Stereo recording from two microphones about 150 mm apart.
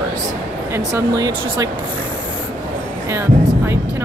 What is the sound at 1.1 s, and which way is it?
Speech, 25° right (ahead or behind).